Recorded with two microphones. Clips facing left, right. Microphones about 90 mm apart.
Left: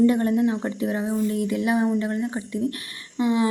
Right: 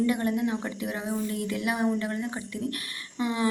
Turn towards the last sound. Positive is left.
turn(degrees=20)  # may be behind; listen again after turning